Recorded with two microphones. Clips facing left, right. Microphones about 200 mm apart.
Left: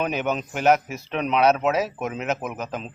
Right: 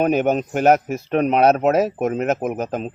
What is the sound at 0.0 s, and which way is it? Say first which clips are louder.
Speech: right 7 dB; 50° right (ahead or behind).